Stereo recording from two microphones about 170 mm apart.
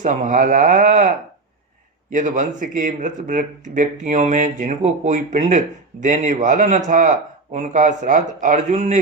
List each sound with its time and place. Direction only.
0.0 s a man's voice: 50° right (ahead or behind)
2.1 s a man's voice: 50° right (ahead or behind)